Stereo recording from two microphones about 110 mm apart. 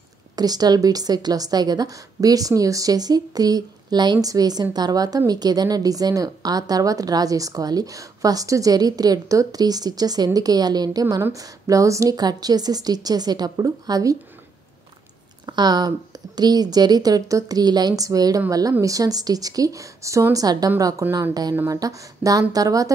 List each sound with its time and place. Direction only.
0.4 s a woman's voice: 35° right (ahead or behind)
15.4 s a woman's voice: 40° right (ahead or behind)